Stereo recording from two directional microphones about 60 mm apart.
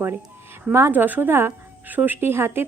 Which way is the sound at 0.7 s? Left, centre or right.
Right.